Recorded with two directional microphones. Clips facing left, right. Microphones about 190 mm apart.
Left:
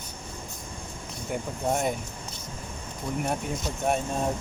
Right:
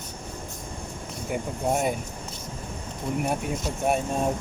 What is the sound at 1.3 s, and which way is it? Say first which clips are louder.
Speech: right 2 dB; 10° right (ahead or behind).